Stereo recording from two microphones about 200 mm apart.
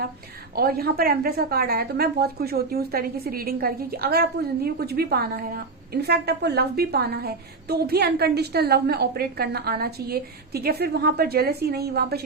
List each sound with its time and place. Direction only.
0.5 s a woman's voice: 50° right (ahead or behind)